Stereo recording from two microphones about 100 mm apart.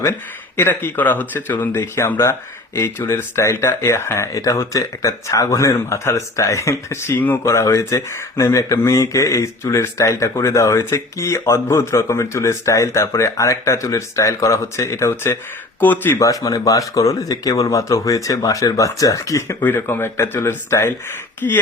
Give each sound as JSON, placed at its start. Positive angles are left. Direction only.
{"t": 0.0, "sound": "speech", "side_deg": 25}
{"t": 16.2, "sound": "speech", "side_deg": 35}
{"t": 19.6, "sound": "speech", "side_deg": 20}